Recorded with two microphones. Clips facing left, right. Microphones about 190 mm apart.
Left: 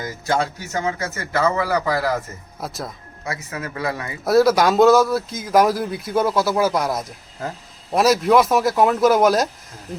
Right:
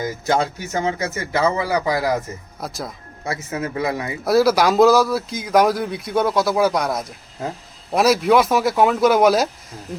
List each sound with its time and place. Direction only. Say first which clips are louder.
0.0 s speech: right 2 dB; 20° right (ahead or behind)
2.6 s speech: even; centre (ahead or behind)
3.2 s speech: right 4 dB; 25° right (ahead or behind)
4.3 s speech: left 1 dB; centre (ahead or behind)